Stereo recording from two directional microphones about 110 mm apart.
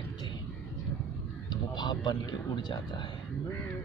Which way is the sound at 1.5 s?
40° left (ahead or behind).